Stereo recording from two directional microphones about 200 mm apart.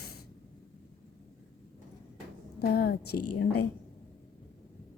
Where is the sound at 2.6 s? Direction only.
50° left (ahead or behind).